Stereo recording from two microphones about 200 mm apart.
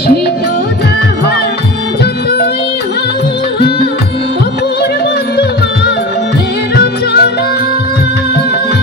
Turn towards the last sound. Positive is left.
turn(degrees=50)  # may be behind; listen again after turning